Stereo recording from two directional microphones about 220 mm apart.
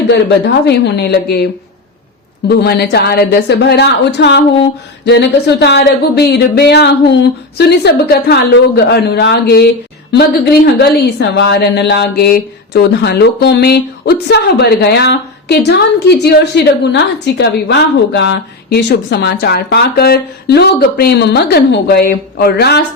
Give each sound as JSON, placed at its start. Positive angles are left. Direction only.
{"t": 0.1, "sound": "a woman's voice", "side_deg": 50}
{"t": 2.6, "sound": "a woman's voice", "side_deg": 45}